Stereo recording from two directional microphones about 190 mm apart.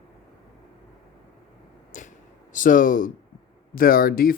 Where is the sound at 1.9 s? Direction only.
40° left (ahead or behind).